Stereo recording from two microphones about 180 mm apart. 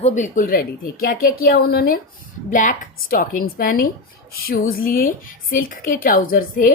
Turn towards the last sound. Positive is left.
turn(degrees=50)  # may be behind; listen again after turning